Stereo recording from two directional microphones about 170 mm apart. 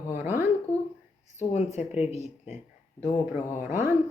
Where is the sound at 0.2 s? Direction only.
15° right (ahead or behind).